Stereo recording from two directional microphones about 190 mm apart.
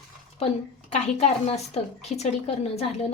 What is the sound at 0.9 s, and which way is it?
A woman's voice, 35° left (ahead or behind).